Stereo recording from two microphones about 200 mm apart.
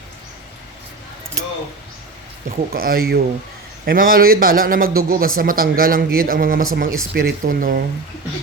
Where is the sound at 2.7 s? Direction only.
50° right (ahead or behind).